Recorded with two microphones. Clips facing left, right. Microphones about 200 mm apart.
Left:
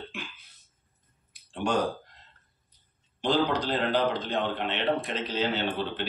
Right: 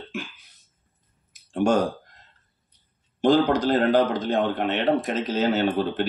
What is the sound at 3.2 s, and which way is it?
A man's voice, 45° right (ahead or behind).